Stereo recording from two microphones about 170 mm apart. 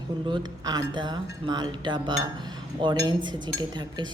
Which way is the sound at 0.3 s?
25° right (ahead or behind).